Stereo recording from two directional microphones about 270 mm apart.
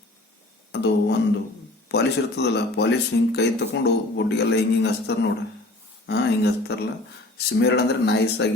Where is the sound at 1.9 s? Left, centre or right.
Left.